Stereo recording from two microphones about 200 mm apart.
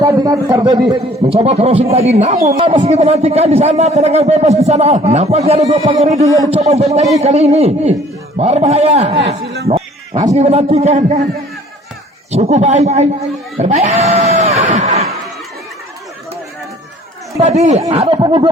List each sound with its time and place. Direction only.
0.0 s a man's voice: 15° right (ahead or behind); by 6.2 s 30° right (ahead or behind)
6.2 s a man's voice: 15° right (ahead or behind)
6.5 s a man's voice: 30° right (ahead or behind)
10.1 s a man's voice: 20° right (ahead or behind)
10.3 s a man's voice: 35° right (ahead or behind)
12.3 s a man's voice: 35° right (ahead or behind)
13.6 s screaming: 30° right (ahead or behind)
17.4 s a man's voice: 35° right (ahead or behind)